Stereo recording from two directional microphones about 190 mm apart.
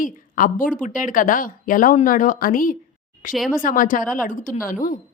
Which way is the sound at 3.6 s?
45° left (ahead or behind).